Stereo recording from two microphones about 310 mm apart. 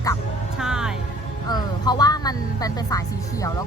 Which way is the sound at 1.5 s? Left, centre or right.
Centre.